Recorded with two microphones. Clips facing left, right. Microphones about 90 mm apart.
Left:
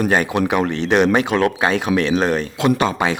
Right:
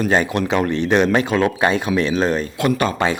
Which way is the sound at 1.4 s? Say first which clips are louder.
Even; centre (ahead or behind).